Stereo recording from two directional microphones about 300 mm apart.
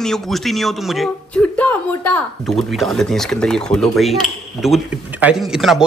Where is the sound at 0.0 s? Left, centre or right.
Centre.